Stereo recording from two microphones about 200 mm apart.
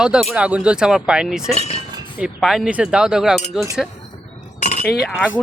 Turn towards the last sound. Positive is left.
turn(degrees=-5)  # may be behind; listen again after turning